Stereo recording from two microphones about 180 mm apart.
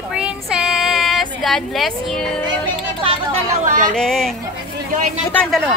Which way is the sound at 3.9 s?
5° left (ahead or behind).